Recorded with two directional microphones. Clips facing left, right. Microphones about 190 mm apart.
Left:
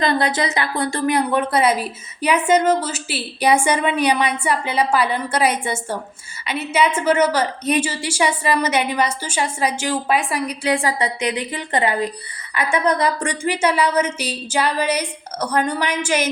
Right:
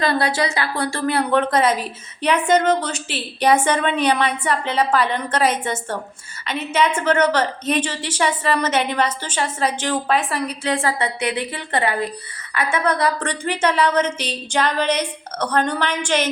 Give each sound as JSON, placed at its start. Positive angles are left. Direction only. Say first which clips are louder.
{"t": 0.0, "sound": "a woman's voice", "louder": "left 1 dB", "side_deg": 20}